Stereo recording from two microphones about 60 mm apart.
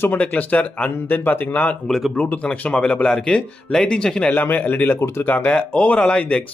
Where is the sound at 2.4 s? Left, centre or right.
Centre.